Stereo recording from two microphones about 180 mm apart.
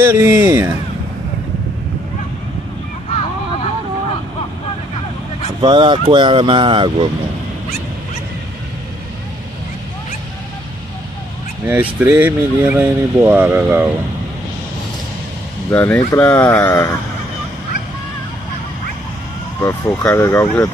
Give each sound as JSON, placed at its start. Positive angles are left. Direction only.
{"t": 0.0, "sound": "speech", "side_deg": -10}
{"t": 5.6, "sound": "speech", "side_deg": -25}
{"t": 11.6, "sound": "speech", "side_deg": -10}
{"t": 15.7, "sound": "speech", "side_deg": 10}
{"t": 19.6, "sound": "speech", "side_deg": 10}